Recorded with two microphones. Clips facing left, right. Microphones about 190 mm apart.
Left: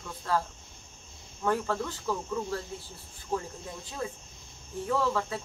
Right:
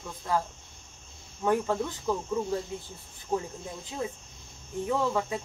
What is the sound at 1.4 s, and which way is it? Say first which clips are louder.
Speech: right 3 dB; 15° right (ahead or behind).